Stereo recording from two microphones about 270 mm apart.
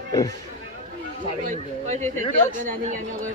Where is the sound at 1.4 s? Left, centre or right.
Right.